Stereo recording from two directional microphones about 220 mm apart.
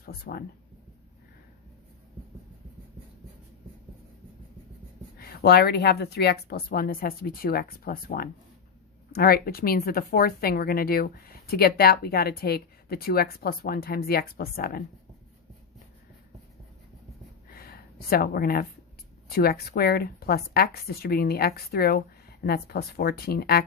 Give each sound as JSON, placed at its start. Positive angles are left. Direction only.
{"t": 0.0, "sound": "speech", "side_deg": 45}
{"t": 5.2, "sound": "speech", "side_deg": 45}
{"t": 17.5, "sound": "a sound", "side_deg": 45}
{"t": 19.3, "sound": "speech", "side_deg": 45}